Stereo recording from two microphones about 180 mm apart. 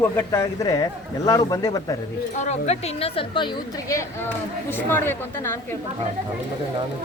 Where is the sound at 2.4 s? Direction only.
40° left (ahead or behind).